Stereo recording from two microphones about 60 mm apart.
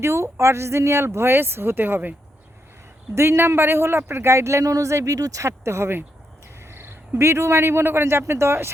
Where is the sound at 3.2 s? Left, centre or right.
Right.